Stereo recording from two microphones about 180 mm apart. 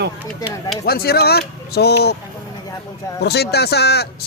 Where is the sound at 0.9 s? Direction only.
60° left (ahead or behind).